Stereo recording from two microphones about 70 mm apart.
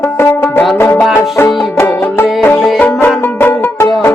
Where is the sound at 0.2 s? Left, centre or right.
Left.